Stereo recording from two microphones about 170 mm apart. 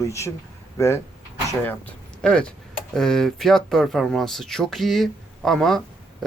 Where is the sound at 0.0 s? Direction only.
15° left (ahead or behind).